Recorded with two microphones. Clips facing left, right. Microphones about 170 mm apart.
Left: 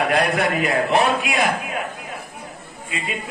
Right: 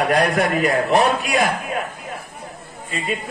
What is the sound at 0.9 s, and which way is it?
Speech, 45° right (ahead or behind).